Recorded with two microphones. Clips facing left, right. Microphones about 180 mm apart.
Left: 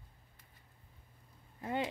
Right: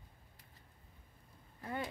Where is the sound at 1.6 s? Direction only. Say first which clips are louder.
Left 5 dB; 20° left (ahead or behind).